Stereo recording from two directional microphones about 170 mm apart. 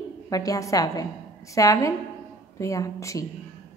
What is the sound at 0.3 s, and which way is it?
A woman's voice, 20° left (ahead or behind).